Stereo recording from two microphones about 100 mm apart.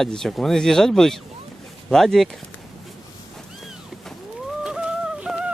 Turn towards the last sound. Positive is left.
turn(degrees=-10)  # may be behind; listen again after turning